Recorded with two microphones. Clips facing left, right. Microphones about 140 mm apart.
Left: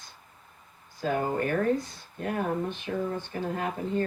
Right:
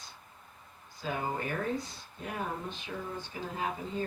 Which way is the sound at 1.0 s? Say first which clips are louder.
Left 7 dB; 55° left (ahead or behind).